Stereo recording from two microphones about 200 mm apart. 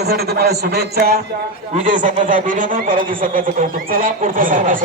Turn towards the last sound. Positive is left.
turn(degrees=-40)  # may be behind; listen again after turning